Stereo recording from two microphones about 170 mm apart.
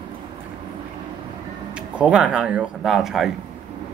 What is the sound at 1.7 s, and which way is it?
Speech, 5° right (ahead or behind).